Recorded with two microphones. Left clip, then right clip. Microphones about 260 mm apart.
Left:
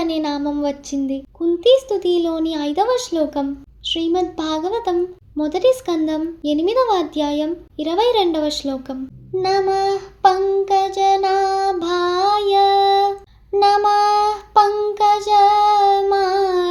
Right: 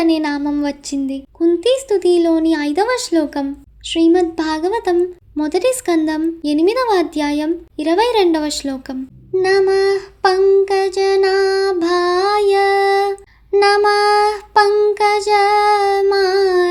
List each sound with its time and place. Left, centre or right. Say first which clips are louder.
0.0 s speech: right 4 dB; right
2.0 s child singing: right 5 dB; right